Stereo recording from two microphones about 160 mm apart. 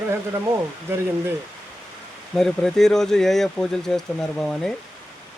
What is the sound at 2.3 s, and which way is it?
Speech, centre (ahead or behind).